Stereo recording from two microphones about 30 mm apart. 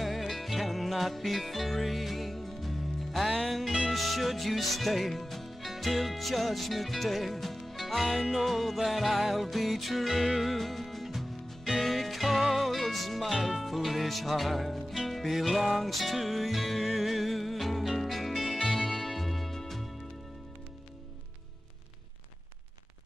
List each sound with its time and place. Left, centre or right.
0.0 s music: centre